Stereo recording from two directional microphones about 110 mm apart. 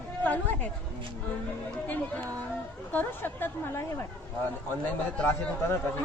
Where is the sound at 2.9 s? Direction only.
20° left (ahead or behind).